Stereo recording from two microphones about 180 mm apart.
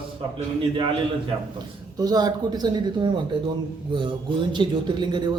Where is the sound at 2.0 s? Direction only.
20° right (ahead or behind).